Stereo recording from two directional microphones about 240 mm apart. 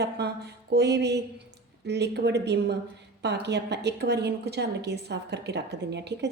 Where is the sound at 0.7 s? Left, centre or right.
Right.